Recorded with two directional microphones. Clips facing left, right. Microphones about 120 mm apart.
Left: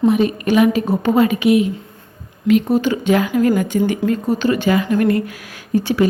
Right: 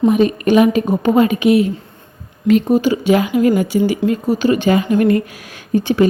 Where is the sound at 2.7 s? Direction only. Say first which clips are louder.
Right 2 dB; 15° right (ahead or behind).